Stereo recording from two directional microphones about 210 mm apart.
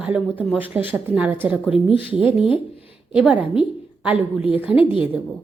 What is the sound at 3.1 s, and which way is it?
A woman's voice, 5° right (ahead or behind).